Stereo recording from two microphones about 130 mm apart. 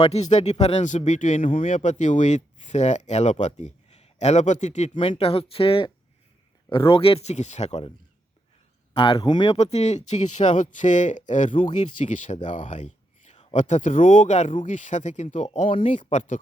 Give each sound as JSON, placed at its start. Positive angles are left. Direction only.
{"t": 0.0, "sound": "speech", "side_deg": 55}
{"t": 4.9, "sound": "speech", "side_deg": 45}
{"t": 8.9, "sound": "speech", "side_deg": 45}
{"t": 9.5, "sound": "speech", "side_deg": 55}